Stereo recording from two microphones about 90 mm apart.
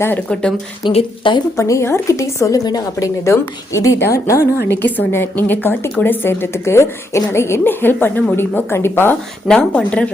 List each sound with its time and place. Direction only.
0.9 s speech: 65° left (ahead or behind)
1.5 s a woman's voice: 35° left (ahead or behind)
4.8 s a woman's voice: 25° left (ahead or behind)
9.6 s speech: 15° left (ahead or behind)